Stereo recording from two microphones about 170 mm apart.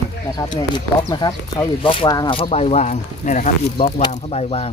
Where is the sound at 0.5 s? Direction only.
25° left (ahead or behind).